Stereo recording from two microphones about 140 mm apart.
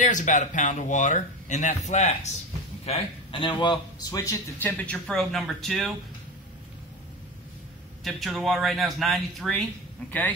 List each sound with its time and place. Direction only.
0.0 s a man's voice: 65° left (ahead or behind); by 5.9 s centre (ahead or behind)
8.0 s speech: centre (ahead or behind)